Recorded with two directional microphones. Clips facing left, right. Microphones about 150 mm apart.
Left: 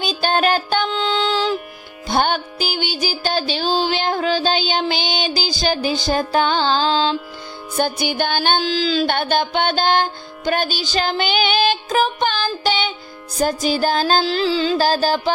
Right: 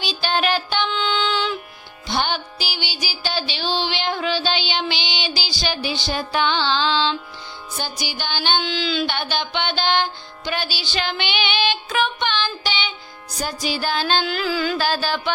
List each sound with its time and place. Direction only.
0.0 s music: 45° left (ahead or behind)
2.0 s music: 50° left (ahead or behind)
7.8 s music: 55° left (ahead or behind)